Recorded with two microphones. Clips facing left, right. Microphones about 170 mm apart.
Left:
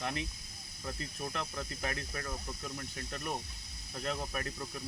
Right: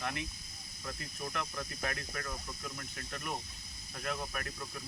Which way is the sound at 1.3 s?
30° left (ahead or behind).